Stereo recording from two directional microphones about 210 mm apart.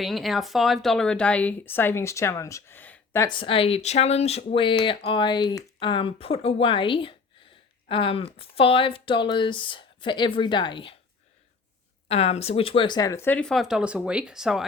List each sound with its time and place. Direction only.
0.0 s speech: centre (ahead or behind); by 10.9 s 25° left (ahead or behind)
12.0 s speech: 30° left (ahead or behind); by 14.7 s centre (ahead or behind)